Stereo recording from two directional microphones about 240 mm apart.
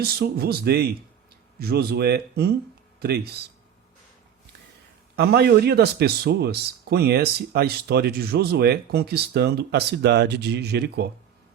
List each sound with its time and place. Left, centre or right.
0.0 s a man's voice: right
5.1 s a man's voice: right